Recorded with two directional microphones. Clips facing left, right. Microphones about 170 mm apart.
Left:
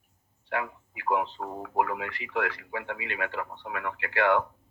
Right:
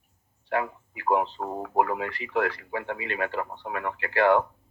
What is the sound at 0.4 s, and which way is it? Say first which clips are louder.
Speech: right 4 dB; 35° right (ahead or behind).